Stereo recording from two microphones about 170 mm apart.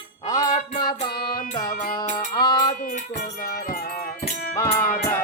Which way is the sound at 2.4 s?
25° left (ahead or behind).